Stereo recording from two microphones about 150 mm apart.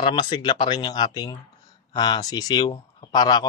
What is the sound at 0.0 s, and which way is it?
Speech, 30° left (ahead or behind).